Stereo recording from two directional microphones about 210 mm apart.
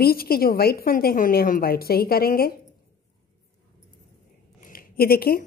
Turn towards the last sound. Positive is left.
turn(degrees=45)  # may be behind; listen again after turning